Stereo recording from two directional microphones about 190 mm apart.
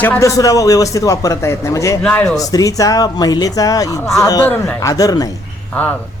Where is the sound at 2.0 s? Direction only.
5° left (ahead or behind).